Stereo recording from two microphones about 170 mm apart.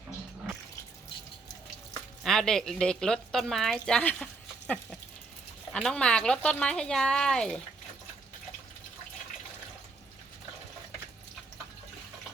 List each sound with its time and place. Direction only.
2.2 s speech: centre (ahead or behind)